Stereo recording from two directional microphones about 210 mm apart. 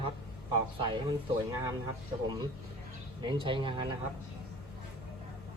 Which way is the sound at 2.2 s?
20° right (ahead or behind).